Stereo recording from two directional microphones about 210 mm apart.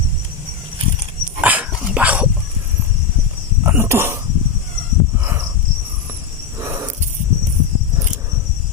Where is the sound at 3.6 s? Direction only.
10° right (ahead or behind).